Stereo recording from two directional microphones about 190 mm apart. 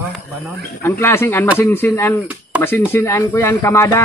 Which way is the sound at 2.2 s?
10° right (ahead or behind).